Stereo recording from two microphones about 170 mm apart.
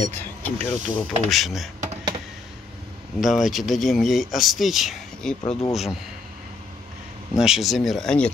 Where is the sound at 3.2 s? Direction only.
Centre (ahead or behind).